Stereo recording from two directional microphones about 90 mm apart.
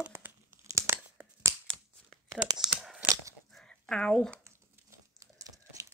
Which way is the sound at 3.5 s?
10° left (ahead or behind).